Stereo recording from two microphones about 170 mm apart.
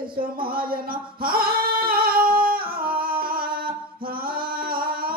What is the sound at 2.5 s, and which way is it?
Humming, 60° right (ahead or behind).